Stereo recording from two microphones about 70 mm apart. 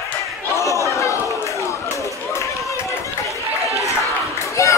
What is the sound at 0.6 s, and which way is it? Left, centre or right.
Chatter, left.